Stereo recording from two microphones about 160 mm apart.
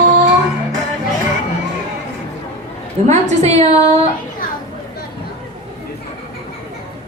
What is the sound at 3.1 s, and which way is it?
Speech, 45° right (ahead or behind).